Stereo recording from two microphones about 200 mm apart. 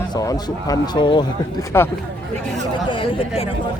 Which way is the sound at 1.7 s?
10° left (ahead or behind).